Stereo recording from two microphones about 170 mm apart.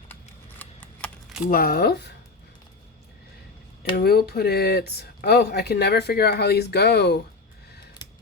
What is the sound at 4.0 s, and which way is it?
Speech, 65° left (ahead or behind).